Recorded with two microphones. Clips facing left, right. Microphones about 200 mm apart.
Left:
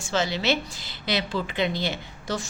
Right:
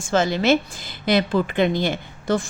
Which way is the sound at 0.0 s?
50° right (ahead or behind).